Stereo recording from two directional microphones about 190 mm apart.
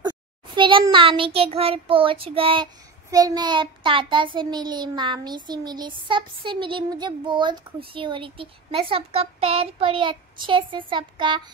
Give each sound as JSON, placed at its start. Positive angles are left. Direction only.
{"t": 0.6, "sound": "child singing", "side_deg": -25}